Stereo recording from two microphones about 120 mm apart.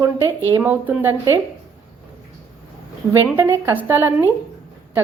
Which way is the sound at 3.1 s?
20° right (ahead or behind).